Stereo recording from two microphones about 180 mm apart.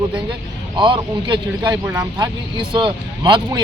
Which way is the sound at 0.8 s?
25° right (ahead or behind).